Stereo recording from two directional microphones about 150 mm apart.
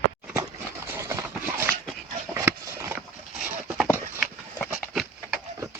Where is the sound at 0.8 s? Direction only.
15° right (ahead or behind).